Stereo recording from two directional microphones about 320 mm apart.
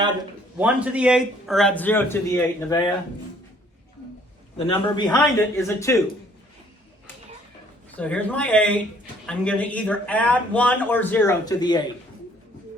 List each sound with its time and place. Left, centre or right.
0.6 s speech: centre
4.5 s speech: centre
5.0 s speech: centre
7.9 s speech: centre